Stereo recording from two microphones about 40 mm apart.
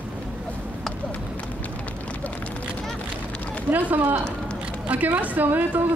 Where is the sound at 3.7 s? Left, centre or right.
Right.